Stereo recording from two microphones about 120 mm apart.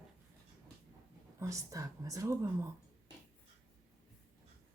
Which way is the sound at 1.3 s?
25° right (ahead or behind).